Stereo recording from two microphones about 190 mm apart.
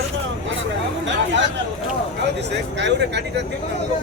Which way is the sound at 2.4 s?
65° right (ahead or behind).